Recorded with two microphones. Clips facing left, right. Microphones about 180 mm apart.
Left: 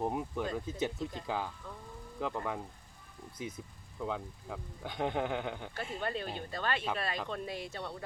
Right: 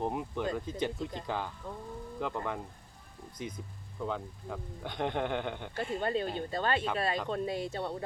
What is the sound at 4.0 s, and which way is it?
Speech, 5° left (ahead or behind).